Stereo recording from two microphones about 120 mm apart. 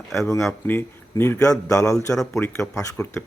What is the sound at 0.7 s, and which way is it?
A man's voice, 20° left (ahead or behind).